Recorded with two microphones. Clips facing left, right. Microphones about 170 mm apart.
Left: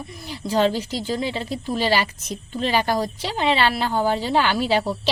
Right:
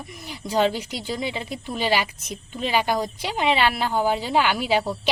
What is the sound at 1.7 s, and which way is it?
A woman's voice, 10° right (ahead or behind).